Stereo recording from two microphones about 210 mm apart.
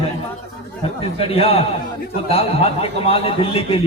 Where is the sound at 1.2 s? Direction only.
30° left (ahead or behind).